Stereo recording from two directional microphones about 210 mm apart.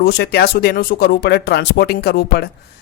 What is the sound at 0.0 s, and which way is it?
Speech, 50° left (ahead or behind).